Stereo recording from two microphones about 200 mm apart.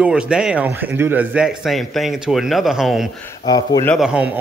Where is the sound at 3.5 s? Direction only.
20° left (ahead or behind).